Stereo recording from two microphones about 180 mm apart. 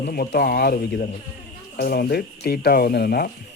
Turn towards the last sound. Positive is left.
turn(degrees=60)  # may be behind; listen again after turning